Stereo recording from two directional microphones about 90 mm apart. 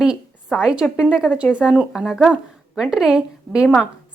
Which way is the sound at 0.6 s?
10° right (ahead or behind).